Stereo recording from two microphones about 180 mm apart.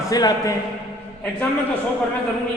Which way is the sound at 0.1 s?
20° left (ahead or behind).